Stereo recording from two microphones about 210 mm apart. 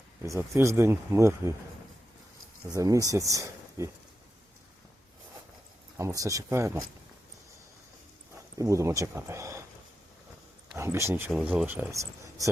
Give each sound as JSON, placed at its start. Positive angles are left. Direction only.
{"t": 0.2, "sound": "speech", "side_deg": -10}
{"t": 2.6, "sound": "speech", "side_deg": -15}
{"t": 6.0, "sound": "speech", "side_deg": -15}
{"t": 8.5, "sound": "speech", "side_deg": -15}
{"t": 10.8, "sound": "speech", "side_deg": -15}